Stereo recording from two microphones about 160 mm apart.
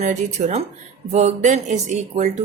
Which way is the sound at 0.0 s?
50° right (ahead or behind).